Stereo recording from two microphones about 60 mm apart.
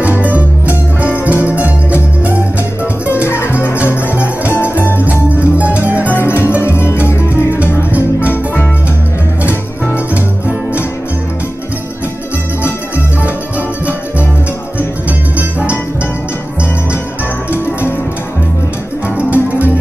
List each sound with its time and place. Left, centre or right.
0.0 s music: right
3.3 s music: left
5.0 s music: right
6.1 s music: left
7.5 s music: right
19.1 s music: right